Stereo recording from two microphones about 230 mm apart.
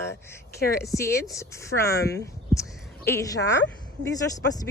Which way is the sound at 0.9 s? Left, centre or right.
Centre.